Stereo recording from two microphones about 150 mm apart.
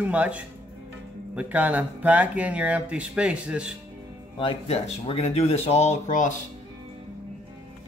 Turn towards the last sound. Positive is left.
turn(degrees=60)  # may be behind; listen again after turning